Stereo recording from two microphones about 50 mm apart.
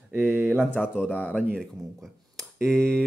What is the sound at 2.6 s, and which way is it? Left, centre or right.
Speech, centre.